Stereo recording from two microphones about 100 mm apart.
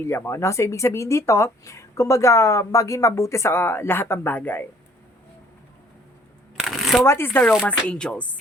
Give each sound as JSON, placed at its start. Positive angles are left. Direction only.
{"t": 0.0, "sound": "speech", "side_deg": 25}
{"t": 6.6, "sound": "shuffling cards", "side_deg": -5}
{"t": 7.0, "sound": "speech", "side_deg": 25}